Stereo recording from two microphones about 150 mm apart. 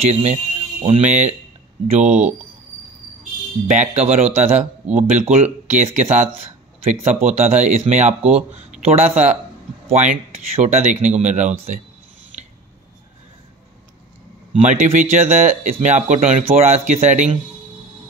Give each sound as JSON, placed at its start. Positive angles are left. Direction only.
{"t": 0.1, "sound": "speech", "side_deg": -50}
{"t": 3.7, "sound": "speech", "side_deg": -50}
{"t": 12.3, "sound": "scissors", "side_deg": -55}
{"t": 14.5, "sound": "speech", "side_deg": -55}